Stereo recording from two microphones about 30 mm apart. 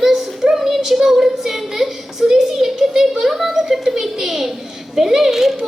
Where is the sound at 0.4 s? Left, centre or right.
Centre.